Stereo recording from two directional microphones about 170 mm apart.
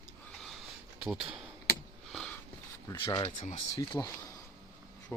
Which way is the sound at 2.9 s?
25° left (ahead or behind).